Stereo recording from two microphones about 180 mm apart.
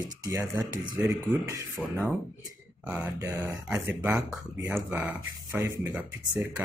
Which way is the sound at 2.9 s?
10° right (ahead or behind).